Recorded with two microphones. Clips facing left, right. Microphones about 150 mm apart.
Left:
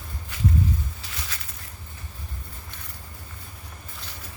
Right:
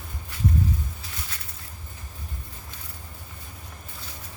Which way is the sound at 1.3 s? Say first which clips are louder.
Left 2 dB; 85° left.